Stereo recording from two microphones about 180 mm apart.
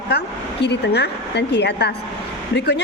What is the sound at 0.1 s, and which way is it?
A woman's voice, 65° left (ahead or behind).